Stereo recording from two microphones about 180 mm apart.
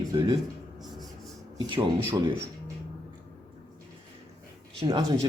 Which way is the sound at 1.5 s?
25° right (ahead or behind).